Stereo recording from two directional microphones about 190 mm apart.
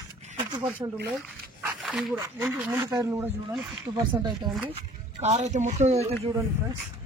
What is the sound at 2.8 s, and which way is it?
Speech, 20° right (ahead or behind).